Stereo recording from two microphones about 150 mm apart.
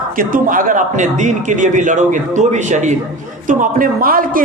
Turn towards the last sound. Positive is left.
turn(degrees=-70)  # may be behind; listen again after turning